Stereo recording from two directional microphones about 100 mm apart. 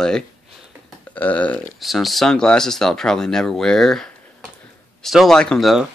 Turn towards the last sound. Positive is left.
turn(degrees=10)  # may be behind; listen again after turning